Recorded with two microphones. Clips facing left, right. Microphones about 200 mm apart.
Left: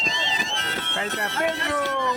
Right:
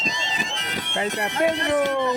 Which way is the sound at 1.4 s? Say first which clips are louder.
Right 5 dB; 20° right (ahead or behind).